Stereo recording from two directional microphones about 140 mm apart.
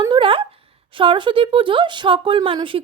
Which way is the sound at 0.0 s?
35° right (ahead or behind).